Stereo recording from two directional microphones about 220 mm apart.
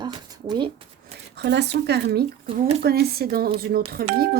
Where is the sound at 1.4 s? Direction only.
50° right (ahead or behind).